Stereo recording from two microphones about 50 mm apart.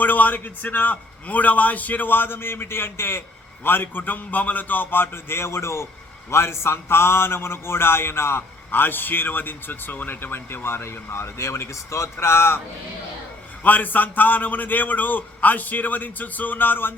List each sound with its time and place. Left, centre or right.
0.0 s a man's voice: left
6.3 s a man's voice: left
8.7 s speech: left
13.7 s a man's voice: left